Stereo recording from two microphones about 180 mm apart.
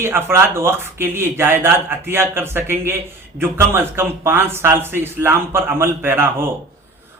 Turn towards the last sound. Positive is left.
turn(degrees=-15)  # may be behind; listen again after turning